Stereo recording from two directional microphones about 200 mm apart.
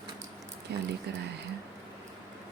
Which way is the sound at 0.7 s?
55° right (ahead or behind).